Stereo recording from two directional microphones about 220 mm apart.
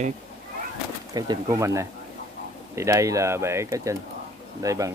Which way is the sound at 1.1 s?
15° right (ahead or behind).